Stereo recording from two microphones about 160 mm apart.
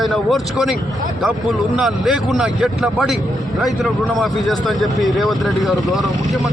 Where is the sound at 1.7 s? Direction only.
5° right (ahead or behind).